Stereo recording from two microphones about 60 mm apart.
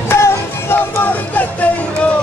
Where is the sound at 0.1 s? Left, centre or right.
Left.